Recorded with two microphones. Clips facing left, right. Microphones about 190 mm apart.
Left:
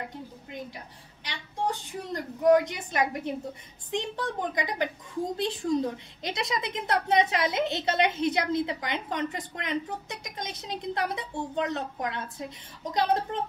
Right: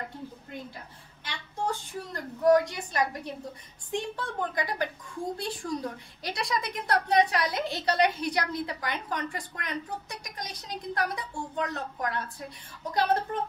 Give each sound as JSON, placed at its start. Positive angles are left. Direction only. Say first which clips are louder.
{"t": 1.2, "sound": "a woman's voice", "louder": "left 1 dB", "side_deg": 15}